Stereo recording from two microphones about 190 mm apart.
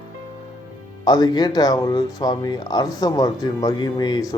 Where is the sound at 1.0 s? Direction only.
20° left (ahead or behind).